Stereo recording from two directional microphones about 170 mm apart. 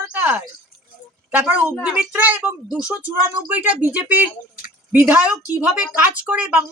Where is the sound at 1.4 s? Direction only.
10° right (ahead or behind).